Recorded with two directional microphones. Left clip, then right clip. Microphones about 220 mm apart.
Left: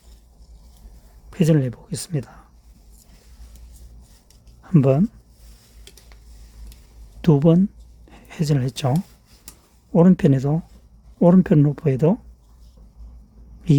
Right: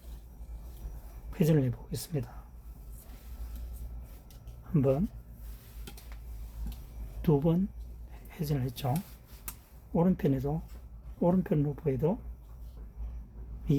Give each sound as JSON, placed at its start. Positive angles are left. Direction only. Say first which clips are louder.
{"t": 1.3, "sound": "speech", "louder": "left 8 dB", "side_deg": 45}
{"t": 4.7, "sound": "speech", "louder": "left 10 dB", "side_deg": 50}
{"t": 7.2, "sound": "speech", "louder": "left 11 dB", "side_deg": 50}
{"t": 9.9, "sound": "speech", "louder": "left 12 dB", "side_deg": 50}